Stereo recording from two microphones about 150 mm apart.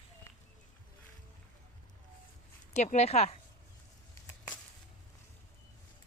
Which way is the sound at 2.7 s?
50° left (ahead or behind).